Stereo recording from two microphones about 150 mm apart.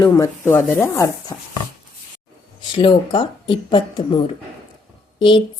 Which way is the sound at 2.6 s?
35° left (ahead or behind).